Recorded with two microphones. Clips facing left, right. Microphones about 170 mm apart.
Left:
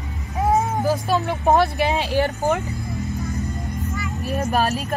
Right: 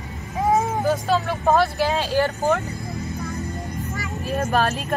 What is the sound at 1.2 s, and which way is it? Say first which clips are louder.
Speech: left 1 dB; 15° left (ahead or behind).